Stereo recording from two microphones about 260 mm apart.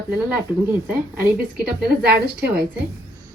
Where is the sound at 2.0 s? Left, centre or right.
Right.